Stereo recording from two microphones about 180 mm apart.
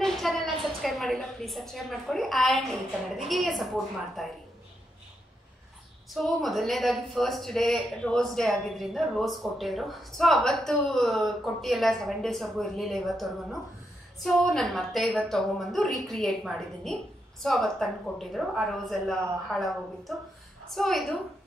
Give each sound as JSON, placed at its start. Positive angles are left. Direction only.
{"t": 0.0, "sound": "a sound", "side_deg": 0}
{"t": 0.8, "sound": "speech", "side_deg": 0}
{"t": 6.1, "sound": "speech", "side_deg": 0}